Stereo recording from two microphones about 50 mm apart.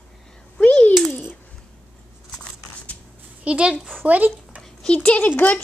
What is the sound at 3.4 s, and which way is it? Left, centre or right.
Speech, right.